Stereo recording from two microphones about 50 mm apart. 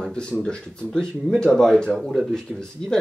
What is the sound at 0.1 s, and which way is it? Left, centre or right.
Speech, centre.